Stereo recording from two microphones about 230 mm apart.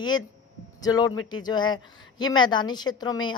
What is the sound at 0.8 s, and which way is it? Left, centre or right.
A man's voice, centre.